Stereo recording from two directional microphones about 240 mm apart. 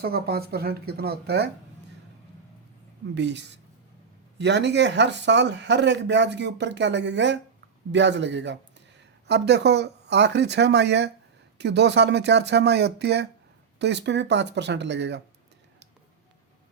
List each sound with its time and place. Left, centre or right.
0.0 s speech: right
3.2 s speech: right